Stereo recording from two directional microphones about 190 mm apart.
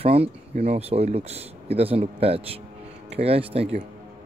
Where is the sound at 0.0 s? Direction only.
30° right (ahead or behind).